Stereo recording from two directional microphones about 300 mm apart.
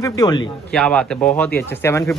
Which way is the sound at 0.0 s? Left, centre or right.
Centre.